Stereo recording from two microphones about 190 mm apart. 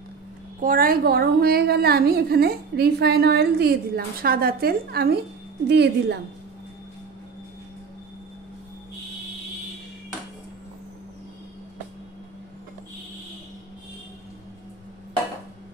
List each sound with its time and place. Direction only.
0.6 s a woman's voice: 45° right (ahead or behind)